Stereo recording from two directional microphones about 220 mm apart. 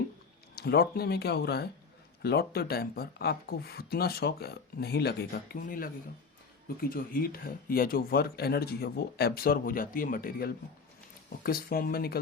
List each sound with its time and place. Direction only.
0.5 s speech: 45° left (ahead or behind)
6.9 s speech: 40° left (ahead or behind)